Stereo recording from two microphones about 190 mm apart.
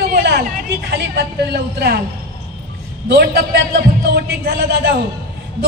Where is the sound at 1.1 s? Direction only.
55° right (ahead or behind).